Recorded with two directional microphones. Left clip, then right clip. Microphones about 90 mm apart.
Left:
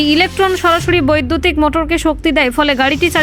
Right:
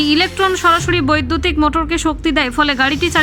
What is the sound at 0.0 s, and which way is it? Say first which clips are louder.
Speech: left 2 dB; 40° left (ahead or behind).